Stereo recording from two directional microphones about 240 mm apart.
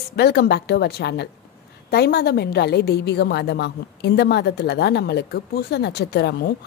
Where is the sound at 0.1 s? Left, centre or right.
Left.